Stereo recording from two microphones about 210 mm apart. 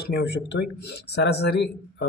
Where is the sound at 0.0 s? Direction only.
50° left (ahead or behind).